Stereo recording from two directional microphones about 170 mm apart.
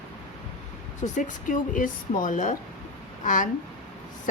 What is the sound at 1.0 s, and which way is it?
Speech, 50° left (ahead or behind).